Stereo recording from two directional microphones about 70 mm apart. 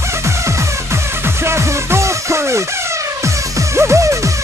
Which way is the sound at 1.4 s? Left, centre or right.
Right.